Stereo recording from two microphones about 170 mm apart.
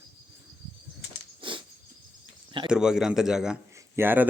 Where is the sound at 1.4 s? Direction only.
30° right (ahead or behind).